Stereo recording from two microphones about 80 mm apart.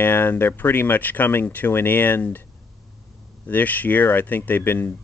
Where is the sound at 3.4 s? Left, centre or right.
Left.